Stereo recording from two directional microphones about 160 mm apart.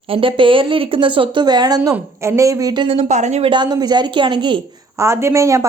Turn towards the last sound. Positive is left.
turn(degrees=-20)  # may be behind; listen again after turning